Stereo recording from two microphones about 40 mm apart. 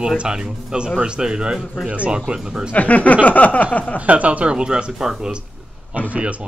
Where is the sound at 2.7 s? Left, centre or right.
Left.